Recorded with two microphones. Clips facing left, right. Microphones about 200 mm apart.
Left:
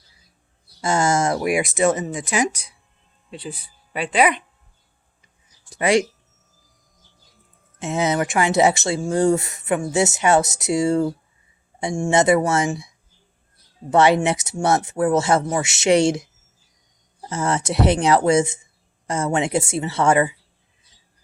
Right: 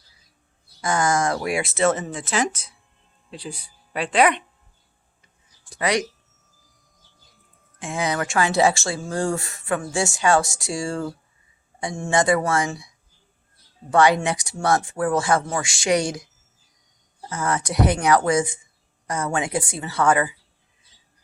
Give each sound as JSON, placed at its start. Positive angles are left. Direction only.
{"t": 0.8, "sound": "speech", "side_deg": 25}
{"t": 3.2, "sound": "speech", "side_deg": 5}
{"t": 5.8, "sound": "speech", "side_deg": 25}
{"t": 7.8, "sound": "speech", "side_deg": 20}
{"t": 13.9, "sound": "speech", "side_deg": 25}